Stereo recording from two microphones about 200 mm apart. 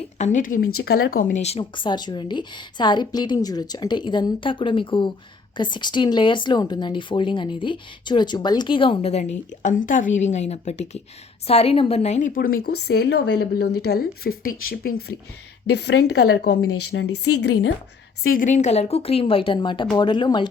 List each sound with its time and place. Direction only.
0.2 s a woman's voice: 40° left (ahead or behind)
0.7 s speech: 90° left
0.9 s a woman's voice: 50° left (ahead or behind)
12.9 s a woman's voice: 55° left (ahead or behind)
15.7 s speech: 55° left (ahead or behind)
16.6 s speech: 75° left (ahead or behind)
18.2 s a woman's voice: 45° left (ahead or behind); by 20.5 s 20° left (ahead or behind)